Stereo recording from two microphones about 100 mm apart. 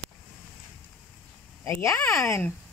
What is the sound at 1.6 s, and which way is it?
Speech, 30° left (ahead or behind).